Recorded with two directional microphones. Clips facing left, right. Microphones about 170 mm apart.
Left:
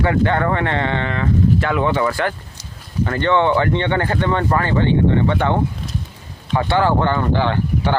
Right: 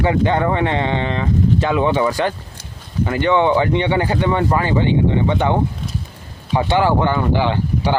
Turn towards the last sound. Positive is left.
turn(degrees=-15)  # may be behind; listen again after turning